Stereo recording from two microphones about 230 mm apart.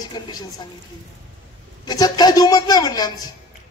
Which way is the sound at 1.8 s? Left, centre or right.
Centre.